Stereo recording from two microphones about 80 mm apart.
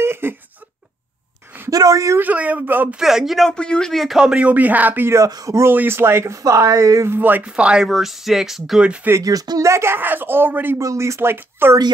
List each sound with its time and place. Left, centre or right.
0.0 s a sound: right
1.7 s speech: right
2.1 s speech: centre
3.0 s speech: centre
3.5 s speech: centre; by 5.1 s right
5.3 s speech: right
5.7 s speech: right
7.1 s speech: right; by 8.8 s centre
8.8 s speech: centre
9.2 s speech: right
10.8 s speech: right
11.1 s speech: right